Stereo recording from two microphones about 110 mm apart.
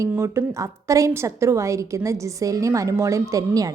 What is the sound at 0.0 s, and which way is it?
A woman's voice, 25° right (ahead or behind).